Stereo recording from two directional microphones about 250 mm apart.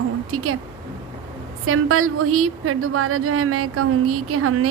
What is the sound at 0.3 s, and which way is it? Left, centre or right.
Speech, right.